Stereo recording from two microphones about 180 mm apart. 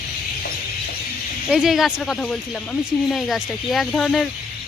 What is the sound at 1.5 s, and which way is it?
Speech, centre (ahead or behind).